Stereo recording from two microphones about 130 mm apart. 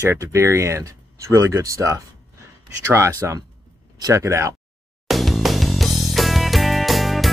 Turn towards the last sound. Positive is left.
turn(degrees=0)  # may be behind; listen again after turning